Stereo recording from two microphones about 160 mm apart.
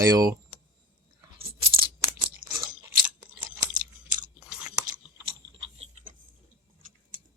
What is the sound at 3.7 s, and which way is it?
Chewing, 55° right (ahead or behind).